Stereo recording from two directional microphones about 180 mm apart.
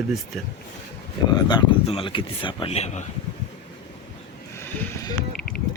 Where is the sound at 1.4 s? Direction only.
25° left (ahead or behind).